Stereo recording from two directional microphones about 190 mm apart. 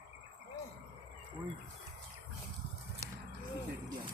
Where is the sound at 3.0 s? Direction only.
15° right (ahead or behind).